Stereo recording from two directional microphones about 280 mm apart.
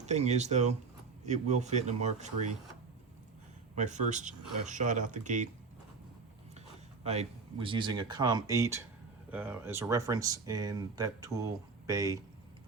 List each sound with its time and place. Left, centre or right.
0.0 s speech: right
3.8 s speech: right
7.0 s speech: right